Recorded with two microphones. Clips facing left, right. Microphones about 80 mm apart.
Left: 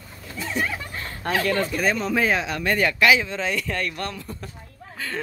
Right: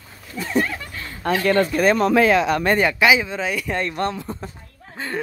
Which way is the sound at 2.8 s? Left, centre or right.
Centre.